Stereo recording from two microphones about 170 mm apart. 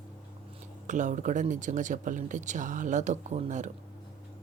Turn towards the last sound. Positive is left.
turn(degrees=-45)  # may be behind; listen again after turning